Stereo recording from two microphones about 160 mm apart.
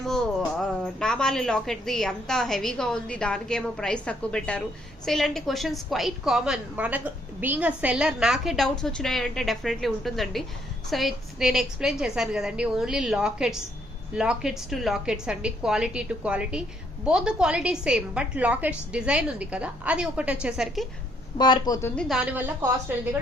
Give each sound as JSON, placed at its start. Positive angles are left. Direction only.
{"t": 0.0, "sound": "a woman's voice", "side_deg": 5}
{"t": 21.3, "sound": "speech", "side_deg": 25}
{"t": 21.8, "sound": "speech", "side_deg": 15}
{"t": 22.1, "sound": "a woman's voice", "side_deg": -10}